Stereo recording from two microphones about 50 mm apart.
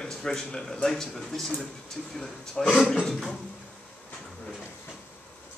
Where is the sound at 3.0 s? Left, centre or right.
Centre.